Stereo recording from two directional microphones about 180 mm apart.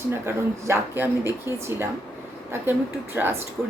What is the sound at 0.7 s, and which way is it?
Speech, 10° right (ahead or behind).